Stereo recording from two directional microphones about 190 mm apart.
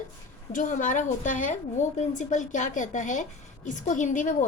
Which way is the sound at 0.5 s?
40° left (ahead or behind).